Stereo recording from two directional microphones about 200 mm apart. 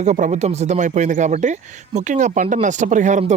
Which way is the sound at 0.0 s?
35° right (ahead or behind).